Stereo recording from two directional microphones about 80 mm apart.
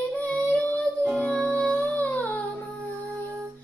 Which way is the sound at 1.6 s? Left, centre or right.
Centre.